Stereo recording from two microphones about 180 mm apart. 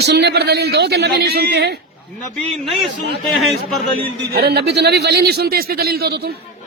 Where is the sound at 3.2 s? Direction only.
Centre (ahead or behind).